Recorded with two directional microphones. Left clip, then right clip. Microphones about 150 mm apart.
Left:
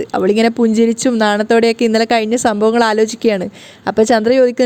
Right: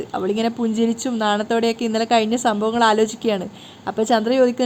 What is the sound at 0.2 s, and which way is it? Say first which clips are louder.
A woman's voice: left 9 dB; 45° left (ahead or behind).